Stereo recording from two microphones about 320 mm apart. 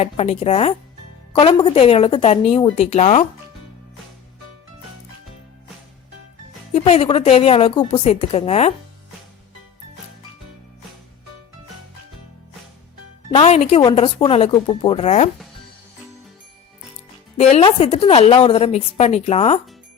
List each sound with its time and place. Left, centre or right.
0.0 s a woman's voice: centre
6.7 s speech: centre
13.3 s speech: centre
17.3 s a woman's voice: centre